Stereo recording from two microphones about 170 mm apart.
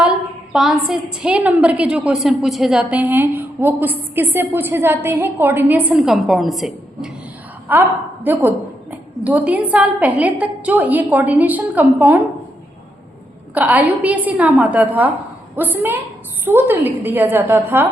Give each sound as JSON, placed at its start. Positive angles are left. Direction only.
{"t": 0.5, "sound": "a woman's voice", "side_deg": -5}
{"t": 7.7, "sound": "a woman's voice", "side_deg": -10}
{"t": 13.5, "sound": "a woman's voice", "side_deg": -10}